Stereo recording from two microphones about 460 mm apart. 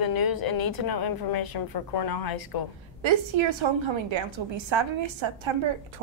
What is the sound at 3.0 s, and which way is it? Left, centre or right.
A woman's voice, right.